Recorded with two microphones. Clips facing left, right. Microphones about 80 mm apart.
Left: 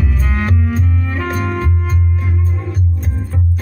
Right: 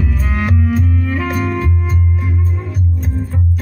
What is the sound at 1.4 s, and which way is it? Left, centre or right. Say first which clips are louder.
Music: right 1 dB; left.